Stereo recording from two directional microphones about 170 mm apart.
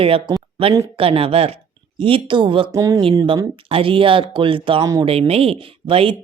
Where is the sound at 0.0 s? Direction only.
35° right (ahead or behind).